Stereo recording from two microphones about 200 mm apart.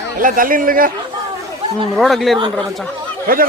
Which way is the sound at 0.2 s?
45° right (ahead or behind).